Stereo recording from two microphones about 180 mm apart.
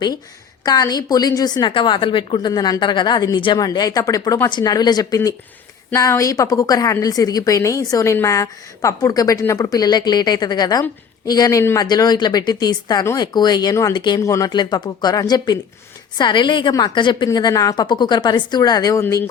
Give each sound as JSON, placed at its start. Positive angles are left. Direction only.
{"t": 0.6, "sound": "a woman's voice", "side_deg": 20}